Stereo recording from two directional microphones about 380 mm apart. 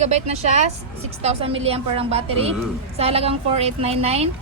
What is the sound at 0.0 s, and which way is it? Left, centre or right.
A woman's voice, centre.